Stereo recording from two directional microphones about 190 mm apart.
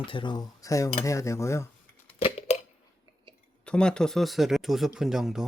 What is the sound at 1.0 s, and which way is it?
Cutlery, 15° left (ahead or behind).